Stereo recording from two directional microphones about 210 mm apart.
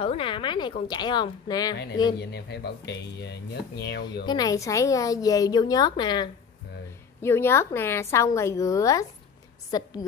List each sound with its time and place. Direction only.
0.0 s a woman's voice: 25° left (ahead or behind)
2.1 s speech: 50° left (ahead or behind)
4.3 s a woman's voice: 15° left (ahead or behind)